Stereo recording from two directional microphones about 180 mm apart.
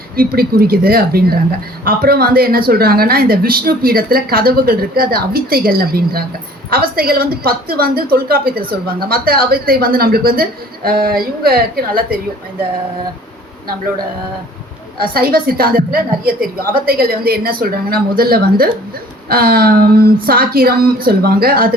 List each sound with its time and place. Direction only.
0.2 s a woman's voice: 55° right (ahead or behind)
15.0 s a woman's voice: 55° right (ahead or behind)